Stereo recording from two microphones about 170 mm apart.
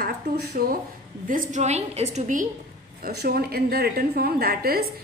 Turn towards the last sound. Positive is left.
turn(degrees=-60)  # may be behind; listen again after turning